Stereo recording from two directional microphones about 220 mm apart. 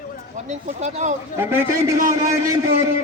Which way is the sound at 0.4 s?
30° right (ahead or behind).